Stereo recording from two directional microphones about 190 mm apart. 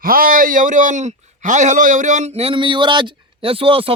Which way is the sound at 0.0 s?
50° right (ahead or behind).